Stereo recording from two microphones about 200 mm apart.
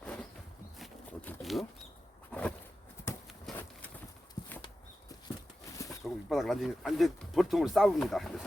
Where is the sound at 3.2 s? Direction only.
Centre (ahead or behind).